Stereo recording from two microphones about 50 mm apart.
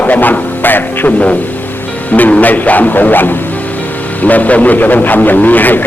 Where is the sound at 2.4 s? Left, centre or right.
Left.